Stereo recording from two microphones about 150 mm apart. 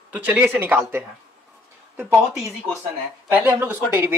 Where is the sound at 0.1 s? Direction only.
10° right (ahead or behind).